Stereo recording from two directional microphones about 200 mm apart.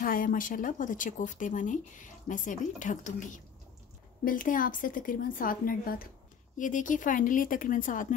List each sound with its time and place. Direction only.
0.0 s a woman's voice: 45° left (ahead or behind)